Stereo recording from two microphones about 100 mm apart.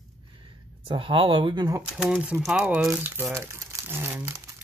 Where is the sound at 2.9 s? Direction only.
25° right (ahead or behind).